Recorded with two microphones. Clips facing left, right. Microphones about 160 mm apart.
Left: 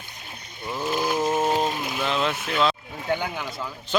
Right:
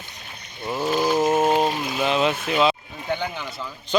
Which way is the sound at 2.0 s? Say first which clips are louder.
Right 5 dB; 10° right (ahead or behind).